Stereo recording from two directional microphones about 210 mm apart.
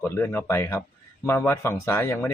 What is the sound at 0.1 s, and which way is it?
Speech, 10° left (ahead or behind).